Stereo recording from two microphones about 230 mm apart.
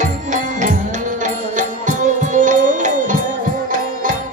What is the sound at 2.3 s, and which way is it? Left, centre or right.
Music, right.